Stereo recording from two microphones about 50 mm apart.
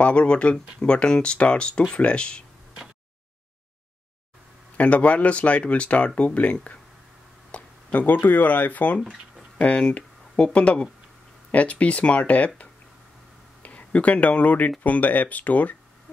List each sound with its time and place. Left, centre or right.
0.0 s speech: left
4.7 s speech: left
13.6 s speech: left